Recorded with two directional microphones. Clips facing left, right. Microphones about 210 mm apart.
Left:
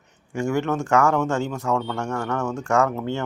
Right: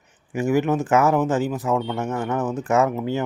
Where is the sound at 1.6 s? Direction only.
15° right (ahead or behind).